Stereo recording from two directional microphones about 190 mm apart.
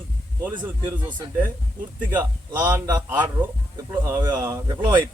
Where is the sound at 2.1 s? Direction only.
10° right (ahead or behind).